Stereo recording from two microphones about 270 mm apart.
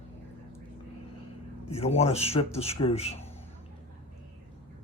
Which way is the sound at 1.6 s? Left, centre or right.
Left.